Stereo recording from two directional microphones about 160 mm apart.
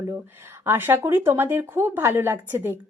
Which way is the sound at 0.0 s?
15° right (ahead or behind).